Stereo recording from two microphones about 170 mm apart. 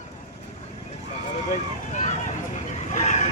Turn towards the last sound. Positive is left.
turn(degrees=40)  # may be behind; listen again after turning